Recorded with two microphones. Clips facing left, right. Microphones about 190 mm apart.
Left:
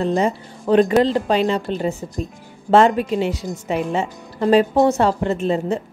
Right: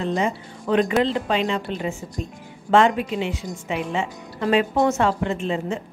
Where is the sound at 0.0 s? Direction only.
40° left (ahead or behind).